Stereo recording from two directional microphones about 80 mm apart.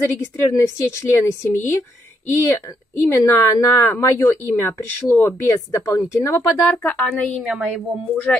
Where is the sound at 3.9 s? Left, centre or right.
Left.